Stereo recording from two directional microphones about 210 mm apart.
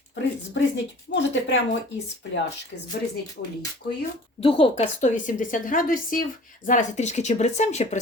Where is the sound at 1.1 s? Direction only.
60° left (ahead or behind).